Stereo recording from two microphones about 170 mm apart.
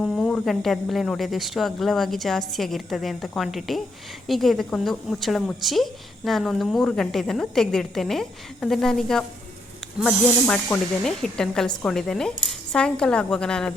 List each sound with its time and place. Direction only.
0.0 s a woman's voice: 5° left (ahead or behind)